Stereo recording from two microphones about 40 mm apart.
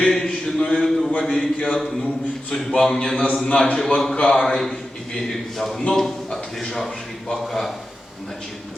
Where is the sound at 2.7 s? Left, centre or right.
Centre; by 4.4 s left.